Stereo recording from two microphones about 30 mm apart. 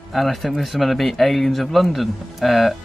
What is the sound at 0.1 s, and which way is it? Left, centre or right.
Speech, centre.